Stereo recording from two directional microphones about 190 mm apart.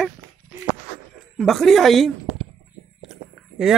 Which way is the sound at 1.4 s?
Centre (ahead or behind).